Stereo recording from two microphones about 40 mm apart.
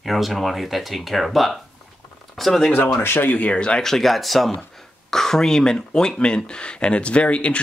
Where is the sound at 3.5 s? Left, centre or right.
Left.